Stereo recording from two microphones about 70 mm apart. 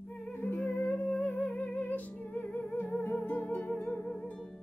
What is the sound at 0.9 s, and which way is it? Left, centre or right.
Music, centre.